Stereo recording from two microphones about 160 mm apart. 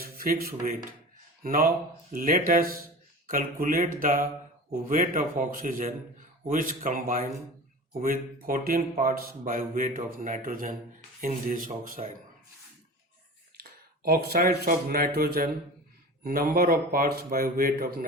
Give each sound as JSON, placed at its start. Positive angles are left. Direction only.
{"t": 0.0, "sound": "a man's voice", "side_deg": -65}
{"t": 12.0, "sound": "speech", "side_deg": -45}
{"t": 13.6, "sound": "a man's voice", "side_deg": -70}